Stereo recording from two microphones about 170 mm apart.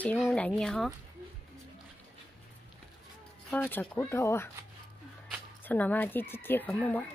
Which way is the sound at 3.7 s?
10° left (ahead or behind).